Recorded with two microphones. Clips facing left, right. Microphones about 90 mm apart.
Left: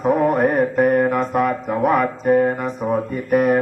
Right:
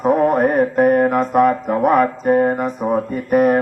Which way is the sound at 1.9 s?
45° right (ahead or behind).